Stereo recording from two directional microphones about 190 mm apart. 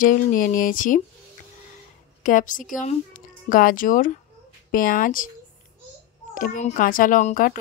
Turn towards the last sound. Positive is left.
turn(degrees=45)  # may be behind; listen again after turning